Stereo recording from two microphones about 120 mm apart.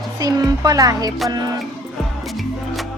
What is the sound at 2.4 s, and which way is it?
Music, centre (ahead or behind).